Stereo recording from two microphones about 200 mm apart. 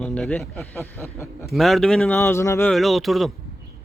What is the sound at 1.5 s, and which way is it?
Speech, centre (ahead or behind).